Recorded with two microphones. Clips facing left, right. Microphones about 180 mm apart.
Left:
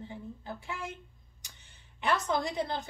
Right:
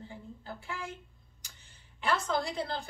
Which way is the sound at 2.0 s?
20° left (ahead or behind).